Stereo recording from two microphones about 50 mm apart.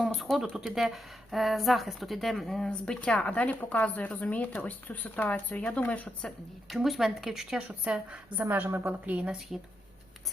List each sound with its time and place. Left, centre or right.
0.2 s speech: centre
2.6 s a woman's voice: centre
6.7 s speech: centre
7.7 s a woman's voice: right
8.4 s a woman's voice: right
9.5 s speech: centre